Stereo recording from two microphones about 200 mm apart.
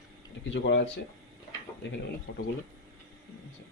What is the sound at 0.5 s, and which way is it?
Speech, 65° left (ahead or behind).